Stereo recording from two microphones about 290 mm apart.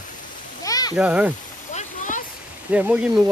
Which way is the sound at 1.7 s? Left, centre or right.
Left.